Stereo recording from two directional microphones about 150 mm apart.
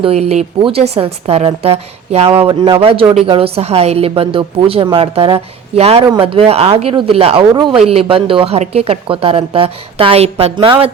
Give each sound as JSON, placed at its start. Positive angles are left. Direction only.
{"t": 0.0, "sound": "a woman's voice", "side_deg": -45}